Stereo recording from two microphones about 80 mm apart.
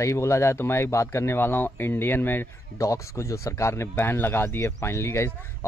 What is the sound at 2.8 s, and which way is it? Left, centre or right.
Speech, left.